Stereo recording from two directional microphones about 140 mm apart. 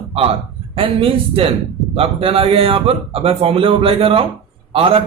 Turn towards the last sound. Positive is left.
turn(degrees=-40)  # may be behind; listen again after turning